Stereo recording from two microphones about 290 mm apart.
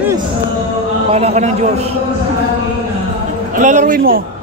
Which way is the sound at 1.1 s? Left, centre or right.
Right.